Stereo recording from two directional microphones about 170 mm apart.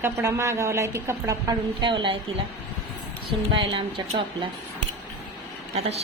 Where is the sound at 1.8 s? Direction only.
30° right (ahead or behind).